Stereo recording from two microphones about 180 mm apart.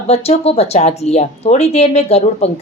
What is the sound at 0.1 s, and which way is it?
A woman's voice, 35° left (ahead or behind).